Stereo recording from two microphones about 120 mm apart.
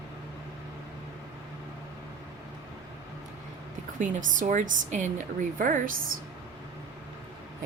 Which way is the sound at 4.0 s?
90° right.